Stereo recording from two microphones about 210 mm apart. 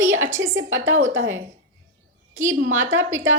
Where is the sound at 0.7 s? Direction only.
65° right (ahead or behind).